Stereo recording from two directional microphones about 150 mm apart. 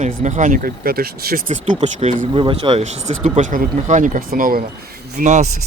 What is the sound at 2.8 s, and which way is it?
Speech, 50° right (ahead or behind).